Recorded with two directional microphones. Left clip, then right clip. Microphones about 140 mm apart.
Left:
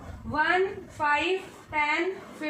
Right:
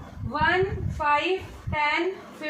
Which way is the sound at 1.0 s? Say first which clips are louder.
Right 2 dB; 15° left (ahead or behind).